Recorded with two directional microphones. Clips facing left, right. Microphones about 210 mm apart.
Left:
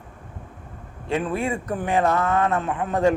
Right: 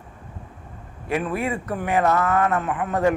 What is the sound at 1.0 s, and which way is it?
Speech, 25° left (ahead or behind).